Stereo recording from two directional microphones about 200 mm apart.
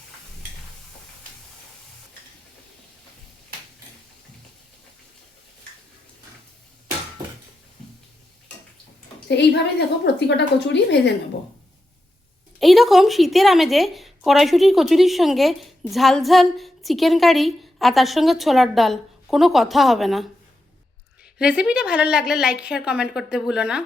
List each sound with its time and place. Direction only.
9.2 s a woman's voice: 60° left (ahead or behind)
12.5 s a woman's voice: centre (ahead or behind)
21.3 s a woman's voice: 5° right (ahead or behind)